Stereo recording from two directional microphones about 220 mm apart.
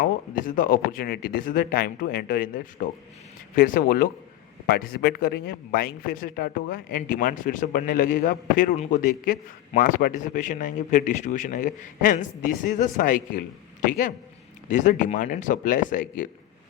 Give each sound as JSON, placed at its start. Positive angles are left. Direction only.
{"t": 0.0, "sound": "a man's voice", "side_deg": 40}
{"t": 14.7, "sound": "a man's voice", "side_deg": 35}